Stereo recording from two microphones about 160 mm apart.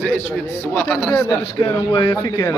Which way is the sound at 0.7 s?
10° left (ahead or behind).